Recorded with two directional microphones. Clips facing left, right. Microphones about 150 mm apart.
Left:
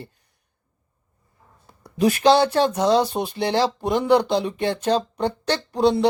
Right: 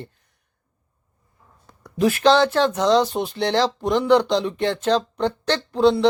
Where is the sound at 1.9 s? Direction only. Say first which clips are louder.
Even; 15° left (ahead or behind).